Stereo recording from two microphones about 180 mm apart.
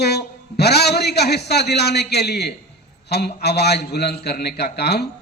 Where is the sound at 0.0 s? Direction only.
65° left (ahead or behind).